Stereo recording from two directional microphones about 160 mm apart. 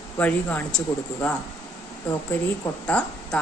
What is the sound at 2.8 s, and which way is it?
Speech, 5° left (ahead or behind).